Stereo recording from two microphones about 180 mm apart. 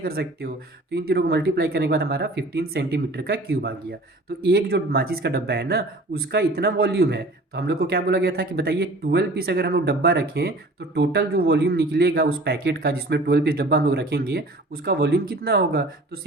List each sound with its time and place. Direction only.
0.0 s speech: 60° right (ahead or behind)